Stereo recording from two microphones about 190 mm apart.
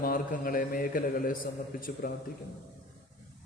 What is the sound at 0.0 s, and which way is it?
A man's voice, 45° left (ahead or behind).